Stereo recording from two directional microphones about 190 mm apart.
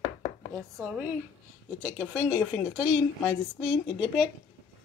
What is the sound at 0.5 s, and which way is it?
Speech, 20° right (ahead or behind).